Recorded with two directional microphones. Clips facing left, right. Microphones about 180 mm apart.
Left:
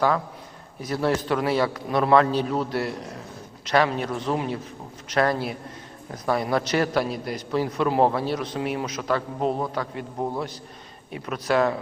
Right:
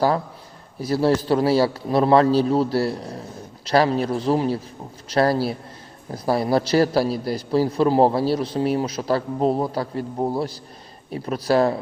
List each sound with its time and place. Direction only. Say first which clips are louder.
0.8 s a man's voice: right 5 dB; 30° right (ahead or behind)
11.1 s a man's voice: right 4 dB; 35° right (ahead or behind)